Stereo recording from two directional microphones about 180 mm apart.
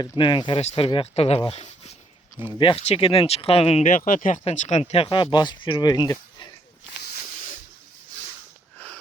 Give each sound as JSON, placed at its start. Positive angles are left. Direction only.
{"t": 0.0, "sound": "speech", "side_deg": 25}
{"t": 1.4, "sound": "a sound", "side_deg": 30}
{"t": 2.6, "sound": "speech", "side_deg": 30}